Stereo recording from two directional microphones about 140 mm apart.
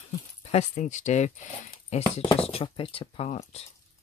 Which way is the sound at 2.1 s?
45° left (ahead or behind).